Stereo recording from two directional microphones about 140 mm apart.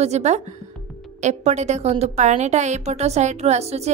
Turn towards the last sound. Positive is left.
turn(degrees=-50)  # may be behind; listen again after turning